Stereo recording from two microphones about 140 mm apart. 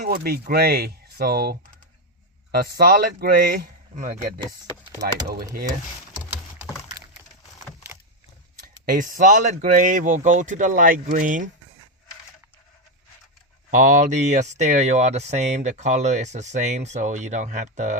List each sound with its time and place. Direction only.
0.0 s speech: 90° right
2.6 s speech: 90° right; by 4.3 s 70° right (ahead or behind)
8.9 s speech: 70° right (ahead or behind)
13.7 s speech: 65° right (ahead or behind)